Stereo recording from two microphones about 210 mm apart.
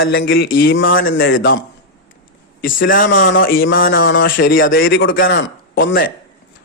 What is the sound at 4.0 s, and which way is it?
Speech, 60° left (ahead or behind).